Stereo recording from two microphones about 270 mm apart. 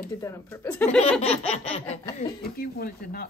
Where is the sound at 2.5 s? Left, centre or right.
Left.